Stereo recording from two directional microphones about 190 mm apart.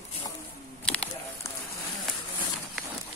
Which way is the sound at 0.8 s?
5° left (ahead or behind).